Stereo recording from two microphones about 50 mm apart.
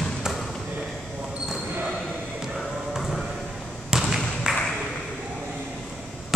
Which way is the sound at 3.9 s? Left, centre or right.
Centre.